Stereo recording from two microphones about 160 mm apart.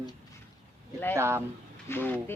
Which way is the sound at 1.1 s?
15° right (ahead or behind).